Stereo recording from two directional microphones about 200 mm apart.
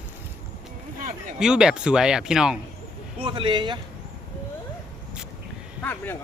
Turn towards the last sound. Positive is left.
turn(degrees=10)  # may be behind; listen again after turning